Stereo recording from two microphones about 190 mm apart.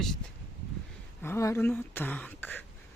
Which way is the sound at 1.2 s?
15° left (ahead or behind).